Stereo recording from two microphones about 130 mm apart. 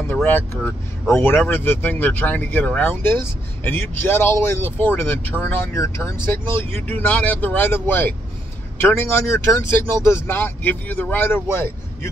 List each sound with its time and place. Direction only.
0.0 s speech: 15° left (ahead or behind)